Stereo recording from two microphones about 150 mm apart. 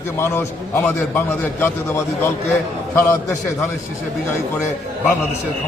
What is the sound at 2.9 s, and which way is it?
Speech, 15° left (ahead or behind).